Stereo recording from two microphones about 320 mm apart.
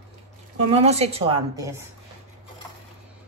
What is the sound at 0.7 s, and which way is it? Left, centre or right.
A woman's voice, centre.